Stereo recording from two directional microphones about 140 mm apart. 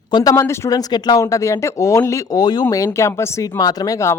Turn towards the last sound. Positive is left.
turn(degrees=25)  # may be behind; listen again after turning